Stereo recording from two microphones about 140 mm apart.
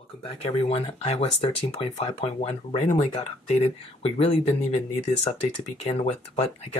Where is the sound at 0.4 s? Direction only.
45° left (ahead or behind).